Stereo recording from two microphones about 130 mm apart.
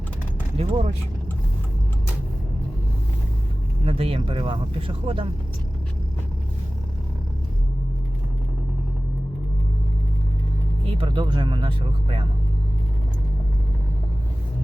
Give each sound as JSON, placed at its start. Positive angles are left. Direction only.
{"t": 0.5, "sound": "speech", "side_deg": -50}
{"t": 3.8, "sound": "speech", "side_deg": -45}
{"t": 10.8, "sound": "speech", "side_deg": -40}